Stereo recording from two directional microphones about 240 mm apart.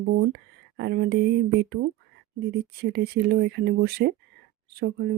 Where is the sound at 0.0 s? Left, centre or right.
Right.